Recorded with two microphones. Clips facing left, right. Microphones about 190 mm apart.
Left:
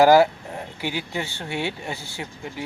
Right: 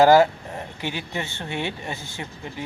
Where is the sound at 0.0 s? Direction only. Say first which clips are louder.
Even; 10° left (ahead or behind).